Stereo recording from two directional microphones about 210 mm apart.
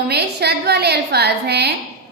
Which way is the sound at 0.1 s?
50° right (ahead or behind).